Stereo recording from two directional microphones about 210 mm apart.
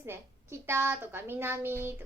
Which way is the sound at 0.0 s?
10° right (ahead or behind).